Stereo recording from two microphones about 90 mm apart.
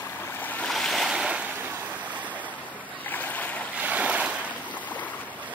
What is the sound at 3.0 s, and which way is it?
Boat, 20° left (ahead or behind).